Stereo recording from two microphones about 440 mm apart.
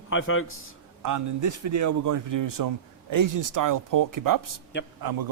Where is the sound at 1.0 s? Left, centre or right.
Right.